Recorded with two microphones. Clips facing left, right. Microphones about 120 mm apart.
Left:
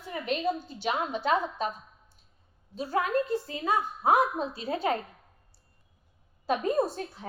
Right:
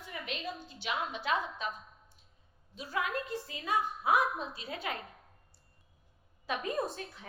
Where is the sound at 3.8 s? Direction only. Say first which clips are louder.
Even; centre (ahead or behind).